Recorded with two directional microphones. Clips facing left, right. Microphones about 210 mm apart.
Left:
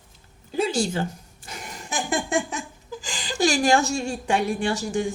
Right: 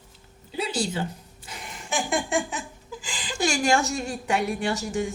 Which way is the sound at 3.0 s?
40° left (ahead or behind).